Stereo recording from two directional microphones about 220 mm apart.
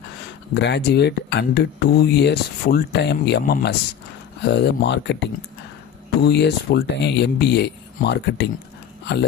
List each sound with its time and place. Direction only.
0.5 s speech: 50° left (ahead or behind)